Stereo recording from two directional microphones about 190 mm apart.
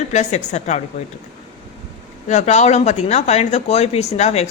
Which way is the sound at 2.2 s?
35° left (ahead or behind).